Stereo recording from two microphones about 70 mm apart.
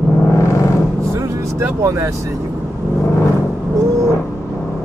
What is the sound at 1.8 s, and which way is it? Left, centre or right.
Speech, right.